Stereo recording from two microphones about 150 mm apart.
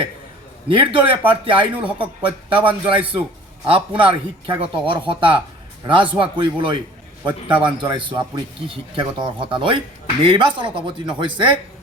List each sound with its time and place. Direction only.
0.7 s speech: 35° right (ahead or behind)